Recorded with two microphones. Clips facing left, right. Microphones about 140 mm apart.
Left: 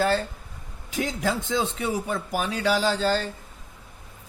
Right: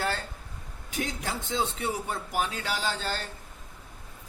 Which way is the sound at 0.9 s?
90° left.